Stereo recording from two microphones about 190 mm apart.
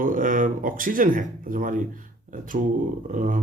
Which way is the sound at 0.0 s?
45° right (ahead or behind).